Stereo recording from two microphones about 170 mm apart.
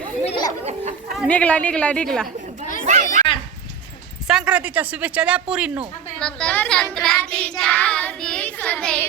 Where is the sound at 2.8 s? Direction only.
45° right (ahead or behind).